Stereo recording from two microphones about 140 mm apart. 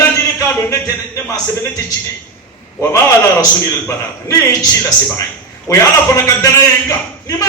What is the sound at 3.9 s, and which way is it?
A man's voice, 25° left (ahead or behind).